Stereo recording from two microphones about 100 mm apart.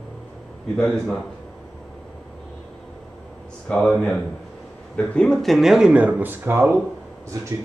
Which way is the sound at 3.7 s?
5° left (ahead or behind).